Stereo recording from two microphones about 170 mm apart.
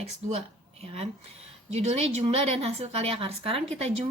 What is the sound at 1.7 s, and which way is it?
Speech, 40° right (ahead or behind).